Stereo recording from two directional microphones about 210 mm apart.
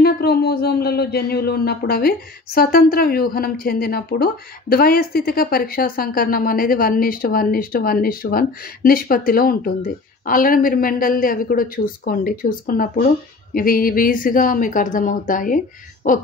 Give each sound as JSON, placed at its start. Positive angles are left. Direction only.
{"t": 0.0, "sound": "a woman's voice", "side_deg": 50}